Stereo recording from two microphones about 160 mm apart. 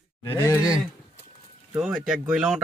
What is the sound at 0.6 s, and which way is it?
Speech, 5° right (ahead or behind).